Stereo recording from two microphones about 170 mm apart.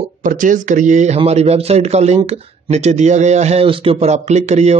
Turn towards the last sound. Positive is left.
turn(degrees=-40)  # may be behind; listen again after turning